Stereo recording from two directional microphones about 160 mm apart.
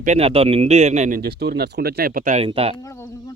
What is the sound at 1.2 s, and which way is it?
Speech, 85° right.